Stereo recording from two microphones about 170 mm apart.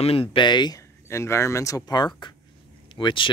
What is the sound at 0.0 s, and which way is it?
Speech, 35° left (ahead or behind).